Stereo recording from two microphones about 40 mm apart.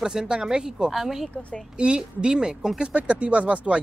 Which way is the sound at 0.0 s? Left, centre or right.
Centre.